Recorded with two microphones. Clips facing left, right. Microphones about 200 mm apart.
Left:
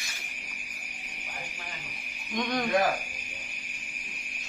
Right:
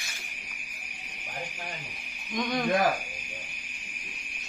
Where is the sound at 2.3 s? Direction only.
Centre (ahead or behind).